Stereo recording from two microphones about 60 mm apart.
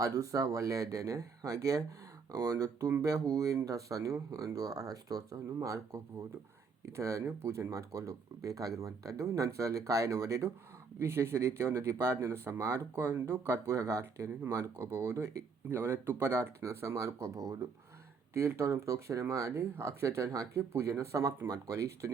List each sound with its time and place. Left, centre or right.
0.0 s speech: right
11.0 s speech: right
18.3 s speech: right